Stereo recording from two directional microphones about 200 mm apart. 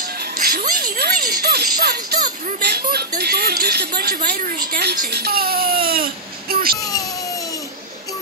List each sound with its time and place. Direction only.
0.4 s speech: 50° right (ahead or behind)